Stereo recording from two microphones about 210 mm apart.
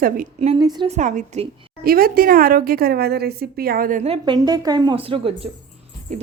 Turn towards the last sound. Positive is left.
turn(degrees=-25)  # may be behind; listen again after turning